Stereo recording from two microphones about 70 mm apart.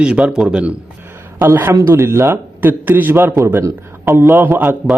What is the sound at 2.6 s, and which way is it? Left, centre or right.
Speech, right.